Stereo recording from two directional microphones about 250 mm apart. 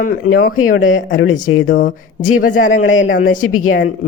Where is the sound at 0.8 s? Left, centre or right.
Left.